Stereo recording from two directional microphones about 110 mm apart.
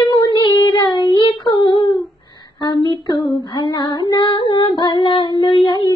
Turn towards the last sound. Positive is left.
turn(degrees=45)  # may be behind; listen again after turning